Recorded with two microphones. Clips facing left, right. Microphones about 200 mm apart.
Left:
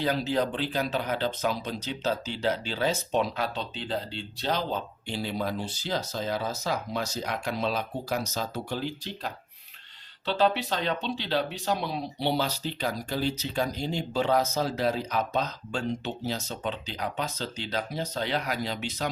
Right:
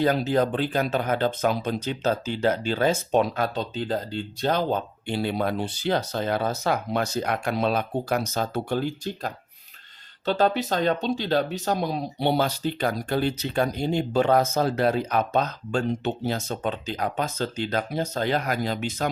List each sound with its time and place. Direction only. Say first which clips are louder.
0.0 s speech: right 5 dB; 50° right (ahead or behind)